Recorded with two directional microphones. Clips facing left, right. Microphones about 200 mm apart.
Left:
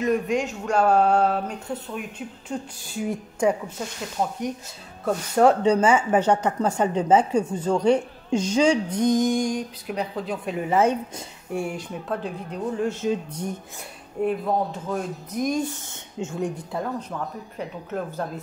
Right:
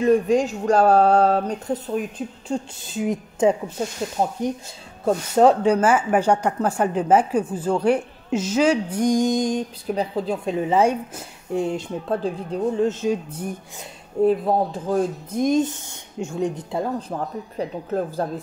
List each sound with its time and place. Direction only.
0.0 s speech: 30° right (ahead or behind)
5.0 s a woman's voice: 20° right (ahead or behind)
10.8 s a woman's voice: 10° right (ahead or behind)
11.6 s speech: 25° right (ahead or behind); by 13.6 s 10° right (ahead or behind)
14.2 s speech: 35° right (ahead or behind)